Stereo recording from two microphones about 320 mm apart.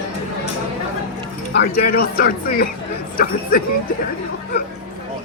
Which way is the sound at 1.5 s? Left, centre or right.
Left.